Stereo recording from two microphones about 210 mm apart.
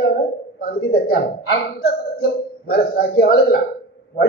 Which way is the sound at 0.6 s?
45° left (ahead or behind).